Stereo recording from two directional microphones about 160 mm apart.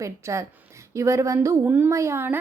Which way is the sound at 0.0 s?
20° right (ahead or behind).